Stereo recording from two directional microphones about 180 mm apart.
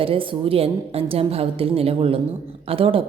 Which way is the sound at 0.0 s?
30° right (ahead or behind).